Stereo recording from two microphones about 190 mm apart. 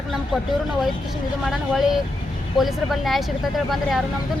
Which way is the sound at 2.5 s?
Centre (ahead or behind).